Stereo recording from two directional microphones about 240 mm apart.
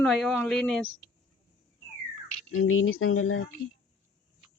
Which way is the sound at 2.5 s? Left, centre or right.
Left.